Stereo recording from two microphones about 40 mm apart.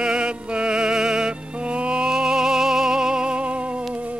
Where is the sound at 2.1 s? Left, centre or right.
Centre.